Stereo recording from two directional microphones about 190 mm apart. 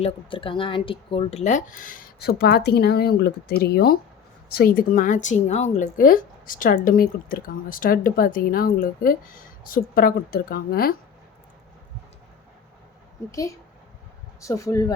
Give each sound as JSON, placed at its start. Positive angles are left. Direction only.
{"t": 0.0, "sound": "speech", "side_deg": 25}
{"t": 14.4, "sound": "speech", "side_deg": 15}